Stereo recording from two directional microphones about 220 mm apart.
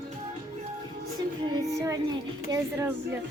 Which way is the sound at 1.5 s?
15° right (ahead or behind).